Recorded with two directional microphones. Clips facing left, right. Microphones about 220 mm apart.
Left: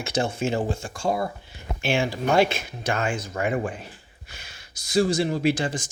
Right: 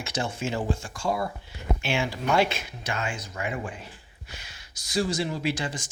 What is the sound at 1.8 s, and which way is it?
Speech, 50° left (ahead or behind).